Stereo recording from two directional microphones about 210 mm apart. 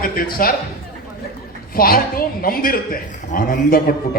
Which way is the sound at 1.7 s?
45° left (ahead or behind).